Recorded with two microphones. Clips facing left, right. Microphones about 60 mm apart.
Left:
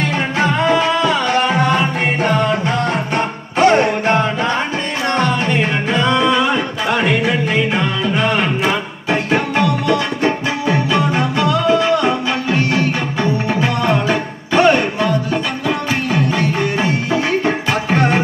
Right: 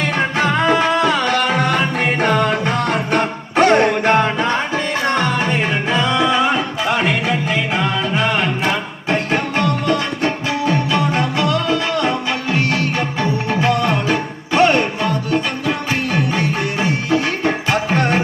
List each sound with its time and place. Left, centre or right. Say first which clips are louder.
0.7 s music: even; right
5.1 s music: left 4 dB; left
6.1 s music: left 1 dB; centre; by 12.1 s left
13.5 s music: right 2 dB; centre
17.1 s music: even; centre